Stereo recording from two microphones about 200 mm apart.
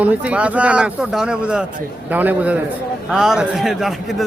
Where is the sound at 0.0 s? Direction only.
5° right (ahead or behind).